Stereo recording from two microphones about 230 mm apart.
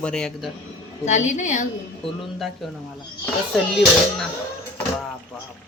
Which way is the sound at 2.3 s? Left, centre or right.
Centre.